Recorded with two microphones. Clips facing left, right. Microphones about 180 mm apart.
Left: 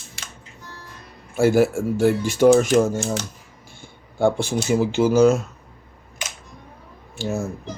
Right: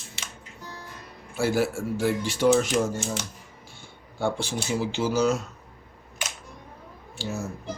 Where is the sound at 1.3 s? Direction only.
50° left (ahead or behind).